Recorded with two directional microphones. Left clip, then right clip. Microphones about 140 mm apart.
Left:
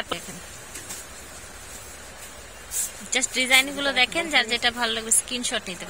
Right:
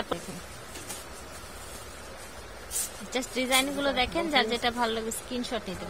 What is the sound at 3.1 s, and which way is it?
A woman's voice, 15° right (ahead or behind).